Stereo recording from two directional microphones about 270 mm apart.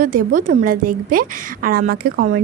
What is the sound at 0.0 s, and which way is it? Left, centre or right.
A woman's voice, right.